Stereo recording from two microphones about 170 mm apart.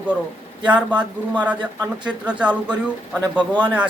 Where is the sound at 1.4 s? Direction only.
10° right (ahead or behind).